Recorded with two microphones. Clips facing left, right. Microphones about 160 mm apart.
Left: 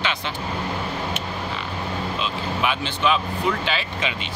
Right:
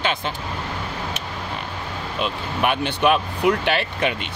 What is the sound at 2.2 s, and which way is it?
Speech, 55° right (ahead or behind).